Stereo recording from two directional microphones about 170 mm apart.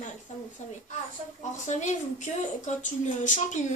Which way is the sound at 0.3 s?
45° left (ahead or behind).